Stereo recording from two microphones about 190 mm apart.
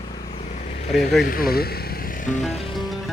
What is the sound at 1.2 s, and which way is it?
Speech, 50° left (ahead or behind).